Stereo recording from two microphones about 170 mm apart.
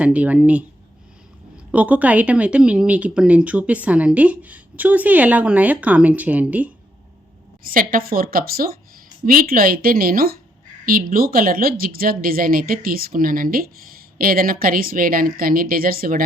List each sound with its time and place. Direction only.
0.0 s speech: 10° right (ahead or behind)
1.7 s speech: 10° right (ahead or behind)
7.6 s speech: 60° right (ahead or behind)